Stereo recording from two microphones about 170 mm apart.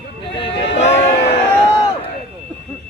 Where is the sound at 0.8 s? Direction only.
40° left (ahead or behind).